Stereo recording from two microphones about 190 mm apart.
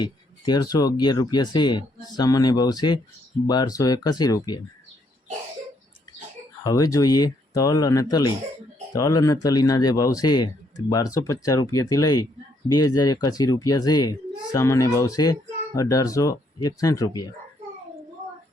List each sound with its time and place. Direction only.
0.0 s speech: 20° left (ahead or behind)
6.7 s speech: 20° left (ahead or behind)